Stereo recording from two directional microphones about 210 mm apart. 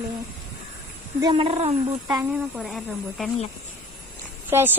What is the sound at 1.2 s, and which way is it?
Speech, 25° right (ahead or behind).